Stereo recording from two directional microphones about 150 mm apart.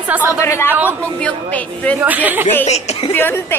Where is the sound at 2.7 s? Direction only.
45° left (ahead or behind).